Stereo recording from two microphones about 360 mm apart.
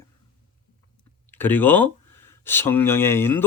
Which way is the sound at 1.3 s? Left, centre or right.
Centre.